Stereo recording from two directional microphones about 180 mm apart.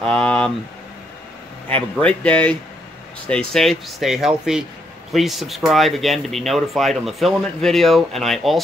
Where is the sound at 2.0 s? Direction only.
5° left (ahead or behind).